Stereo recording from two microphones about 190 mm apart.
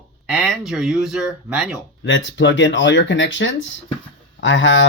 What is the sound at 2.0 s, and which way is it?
A man's voice, 75° left (ahead or behind).